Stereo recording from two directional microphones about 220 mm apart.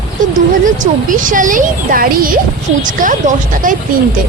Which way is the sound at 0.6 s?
35° right (ahead or behind).